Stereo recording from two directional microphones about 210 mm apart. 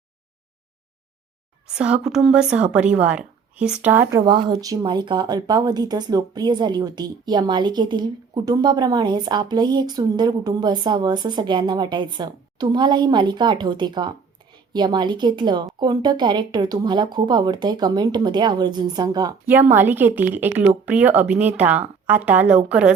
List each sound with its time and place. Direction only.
1.6 s speech: 5° right (ahead or behind)
4.3 s speech: 20° right (ahead or behind)